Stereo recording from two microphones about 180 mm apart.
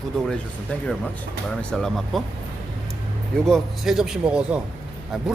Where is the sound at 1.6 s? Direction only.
5° left (ahead or behind).